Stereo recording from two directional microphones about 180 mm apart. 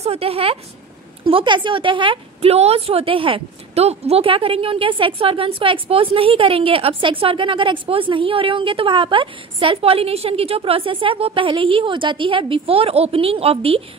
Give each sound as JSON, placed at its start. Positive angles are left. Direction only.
{"t": 0.0, "sound": "a woman's voice", "side_deg": -35}